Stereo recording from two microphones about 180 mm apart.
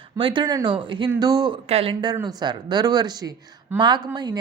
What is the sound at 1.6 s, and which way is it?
A woman's voice, 35° right (ahead or behind).